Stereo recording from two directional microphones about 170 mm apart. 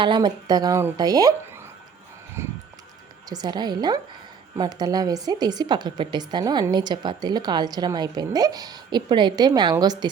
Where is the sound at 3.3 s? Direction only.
25° right (ahead or behind).